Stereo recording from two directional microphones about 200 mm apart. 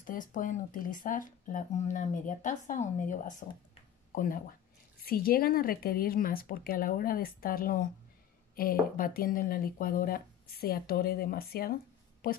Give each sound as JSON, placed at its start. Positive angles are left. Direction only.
{"t": 0.0, "sound": "speech", "side_deg": 40}